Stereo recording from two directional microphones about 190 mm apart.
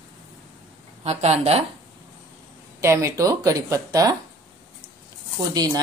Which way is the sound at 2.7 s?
15° right (ahead or behind).